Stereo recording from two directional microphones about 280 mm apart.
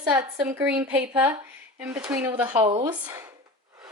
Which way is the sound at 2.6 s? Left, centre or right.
Right.